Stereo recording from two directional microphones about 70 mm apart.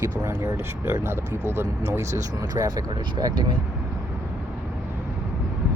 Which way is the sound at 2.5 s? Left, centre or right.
Right.